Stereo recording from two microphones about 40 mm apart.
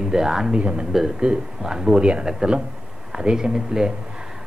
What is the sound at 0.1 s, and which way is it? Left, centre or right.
Speech, centre.